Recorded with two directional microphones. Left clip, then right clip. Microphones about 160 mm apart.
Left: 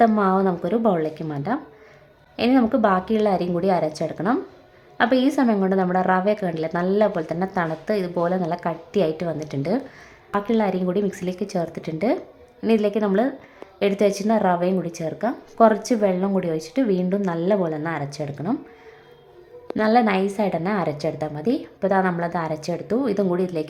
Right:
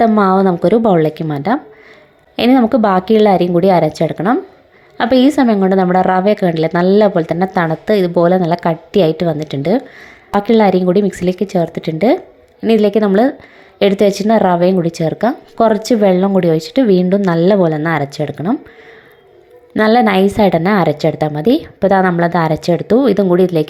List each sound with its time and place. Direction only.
0.2 s a woman's voice: 35° right (ahead or behind)
19.7 s a woman's voice: 35° right (ahead or behind)